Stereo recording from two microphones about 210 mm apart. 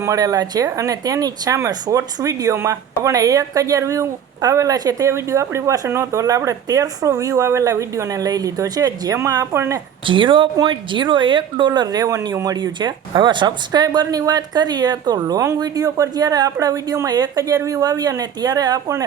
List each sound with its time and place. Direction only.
0.0 s speech: 15° right (ahead or behind)